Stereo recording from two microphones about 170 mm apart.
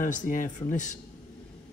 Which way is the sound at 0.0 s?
50° left (ahead or behind).